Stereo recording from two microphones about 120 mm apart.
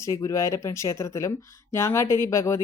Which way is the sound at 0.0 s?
25° left (ahead or behind).